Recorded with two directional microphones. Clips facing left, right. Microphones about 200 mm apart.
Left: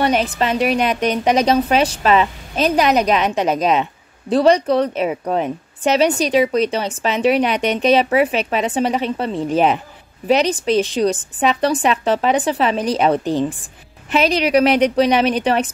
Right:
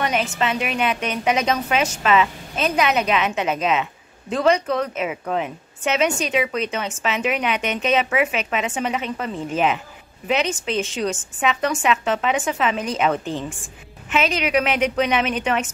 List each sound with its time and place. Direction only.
0.0 s a woman's voice: 35° left (ahead or behind)